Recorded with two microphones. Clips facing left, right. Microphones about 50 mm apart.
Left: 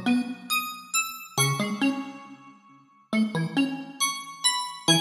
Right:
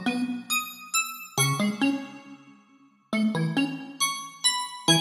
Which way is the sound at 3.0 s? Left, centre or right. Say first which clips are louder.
Even; centre.